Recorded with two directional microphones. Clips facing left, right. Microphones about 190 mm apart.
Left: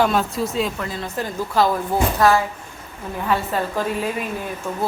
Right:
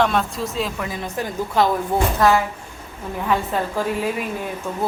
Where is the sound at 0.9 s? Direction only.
15° right (ahead or behind).